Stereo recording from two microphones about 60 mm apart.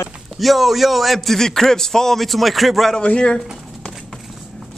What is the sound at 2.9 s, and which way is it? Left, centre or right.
Speech, centre.